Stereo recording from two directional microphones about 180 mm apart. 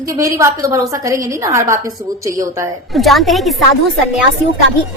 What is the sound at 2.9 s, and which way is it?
Speech, centre (ahead or behind).